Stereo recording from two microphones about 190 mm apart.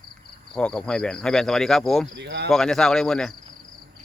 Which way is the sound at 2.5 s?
5° left (ahead or behind).